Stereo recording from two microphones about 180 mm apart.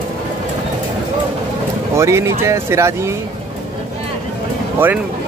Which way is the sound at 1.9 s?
15° right (ahead or behind).